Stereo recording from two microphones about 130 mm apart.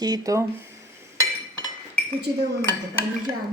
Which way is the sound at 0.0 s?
30° right (ahead or behind).